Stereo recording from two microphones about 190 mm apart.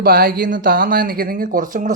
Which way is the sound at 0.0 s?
50° right (ahead or behind).